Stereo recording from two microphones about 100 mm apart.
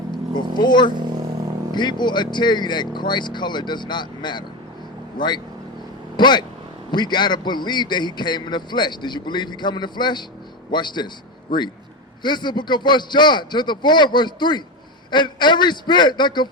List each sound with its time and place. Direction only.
0.1 s a man's voice: 50° left (ahead or behind)
6.1 s a man's voice: 50° left (ahead or behind)